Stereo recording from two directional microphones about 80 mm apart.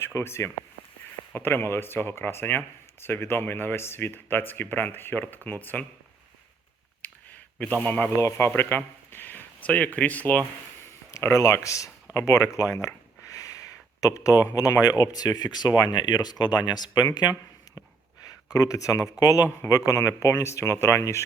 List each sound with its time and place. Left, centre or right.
0.0 s speech: left
7.6 s speech: centre
8.1 s speech: left
10.8 s speech: left
18.5 s speech: left